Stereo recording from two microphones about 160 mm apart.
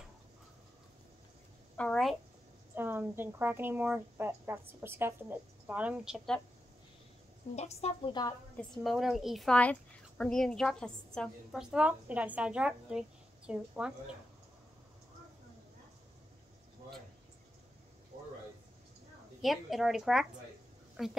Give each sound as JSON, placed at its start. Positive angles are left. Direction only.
{"t": 1.8, "sound": "a woman's voice", "side_deg": 0}
{"t": 2.7, "sound": "a woman's voice", "side_deg": -15}
{"t": 7.5, "sound": "a woman's voice", "side_deg": 40}
{"t": 8.1, "sound": "a woman's voice", "side_deg": 25}
{"t": 8.5, "sound": "a woman's voice", "side_deg": 0}
{"t": 11.7, "sound": "a woman's voice", "side_deg": -10}
{"t": 19.4, "sound": "a woman's voice", "side_deg": 0}